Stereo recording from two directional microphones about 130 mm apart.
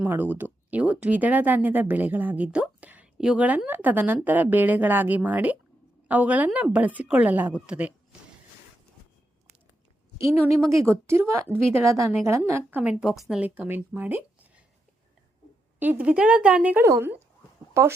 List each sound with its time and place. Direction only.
0.0 s speech: 15° right (ahead or behind)
10.7 s a woman's voice: 20° right (ahead or behind); by 13.4 s 5° right (ahead or behind)
13.4 s speech: 15° right (ahead or behind)
15.8 s a woman's voice: 15° right (ahead or behind)